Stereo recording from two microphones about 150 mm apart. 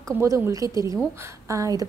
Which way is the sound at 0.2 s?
20° right (ahead or behind).